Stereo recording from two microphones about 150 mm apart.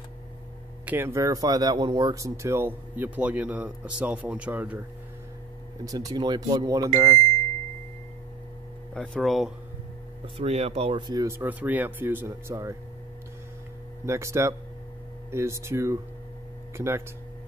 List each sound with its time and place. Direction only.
0.8 s speech: 15° right (ahead or behind)
5.9 s speech: 25° right (ahead or behind)
8.9 s speech: 5° left (ahead or behind)
10.2 s speech: 40° right (ahead or behind); by 12.7 s 20° right (ahead or behind)
14.0 s speech: 20° right (ahead or behind)